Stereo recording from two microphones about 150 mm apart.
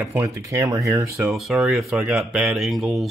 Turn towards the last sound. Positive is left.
turn(degrees=0)  # may be behind; listen again after turning